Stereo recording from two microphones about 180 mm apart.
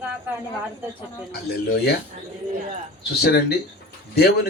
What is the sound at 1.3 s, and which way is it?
Speech, 60° left (ahead or behind).